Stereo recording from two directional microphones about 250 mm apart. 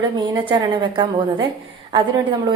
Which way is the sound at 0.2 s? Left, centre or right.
Centre.